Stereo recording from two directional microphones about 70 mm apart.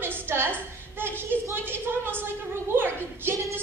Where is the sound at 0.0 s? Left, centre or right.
Right.